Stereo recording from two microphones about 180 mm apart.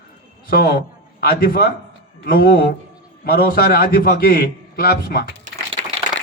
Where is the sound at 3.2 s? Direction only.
55° left (ahead or behind).